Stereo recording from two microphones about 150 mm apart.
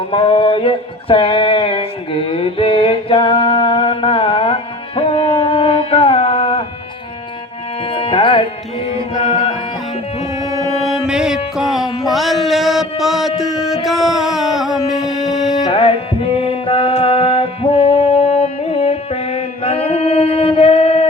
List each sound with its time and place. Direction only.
0.1 s a sound: 35° left (ahead or behind)
7.9 s tabla: 40° left (ahead or behind)
8.9 s music: 40° left (ahead or behind)
10.8 s music: 5° right (ahead or behind)
15.6 s music: 40° left (ahead or behind)